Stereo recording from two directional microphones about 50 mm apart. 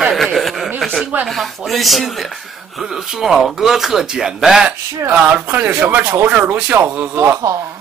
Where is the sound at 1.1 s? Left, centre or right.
Right.